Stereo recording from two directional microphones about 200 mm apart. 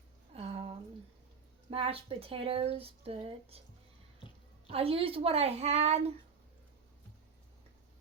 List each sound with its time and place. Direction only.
0.3 s a sound: 30° right (ahead or behind)
1.7 s speech: 30° right (ahead or behind)
4.7 s a woman's voice: 30° right (ahead or behind)